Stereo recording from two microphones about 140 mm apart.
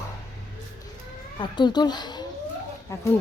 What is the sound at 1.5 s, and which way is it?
Speech, 30° left (ahead or behind).